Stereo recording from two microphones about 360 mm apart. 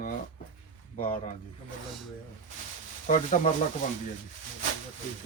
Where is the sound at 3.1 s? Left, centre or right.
Centre.